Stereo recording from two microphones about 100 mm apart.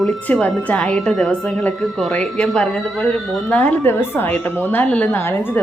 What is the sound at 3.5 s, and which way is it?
A woman's voice, 15° left (ahead or behind).